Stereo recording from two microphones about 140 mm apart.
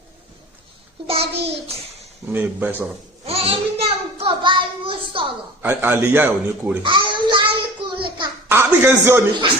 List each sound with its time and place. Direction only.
1.0 s child singing: 45° right (ahead or behind)
2.2 s a man's voice: 15° right (ahead or behind)
3.2 s a sound: 45° right (ahead or behind)
5.6 s a man's voice: 15° right (ahead or behind)
6.8 s a sound: 35° right (ahead or behind)
8.4 s a man's voice: 15° right (ahead or behind)